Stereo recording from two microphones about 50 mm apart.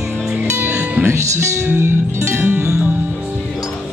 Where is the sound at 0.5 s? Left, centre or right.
Right.